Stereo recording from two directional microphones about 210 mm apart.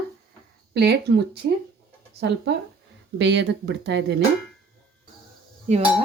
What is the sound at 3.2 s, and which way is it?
Speech, 55° right (ahead or behind).